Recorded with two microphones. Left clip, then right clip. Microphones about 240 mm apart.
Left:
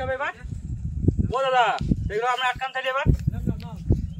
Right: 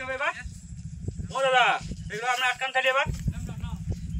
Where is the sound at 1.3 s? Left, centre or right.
Left.